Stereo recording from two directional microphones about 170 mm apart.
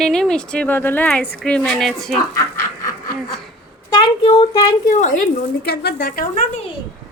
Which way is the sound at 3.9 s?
30° left (ahead or behind).